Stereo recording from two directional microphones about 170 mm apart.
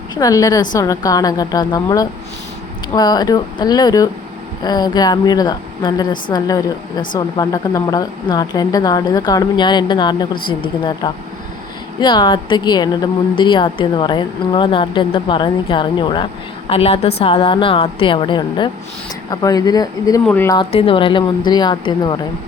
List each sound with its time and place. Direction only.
0.1 s speech: 20° left (ahead or behind)
20.2 s speech: 10° left (ahead or behind)
20.5 s speech: 30° left (ahead or behind)